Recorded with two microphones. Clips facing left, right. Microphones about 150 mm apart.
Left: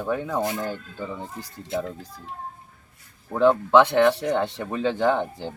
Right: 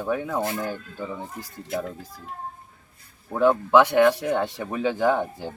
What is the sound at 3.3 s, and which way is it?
Speech, 10° right (ahead or behind).